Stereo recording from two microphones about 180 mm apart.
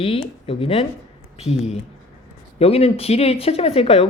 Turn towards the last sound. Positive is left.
turn(degrees=35)  # may be behind; listen again after turning